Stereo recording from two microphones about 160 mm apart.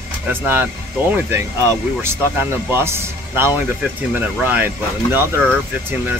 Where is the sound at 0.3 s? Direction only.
15° right (ahead or behind).